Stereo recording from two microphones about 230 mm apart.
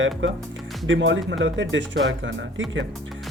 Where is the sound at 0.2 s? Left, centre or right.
Right.